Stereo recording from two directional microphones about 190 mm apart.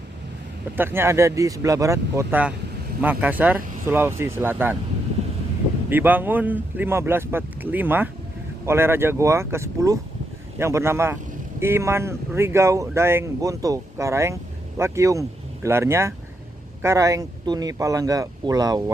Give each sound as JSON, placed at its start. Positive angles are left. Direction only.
{"t": 0.8, "sound": "speech", "side_deg": -10}
{"t": 5.9, "sound": "speech", "side_deg": -10}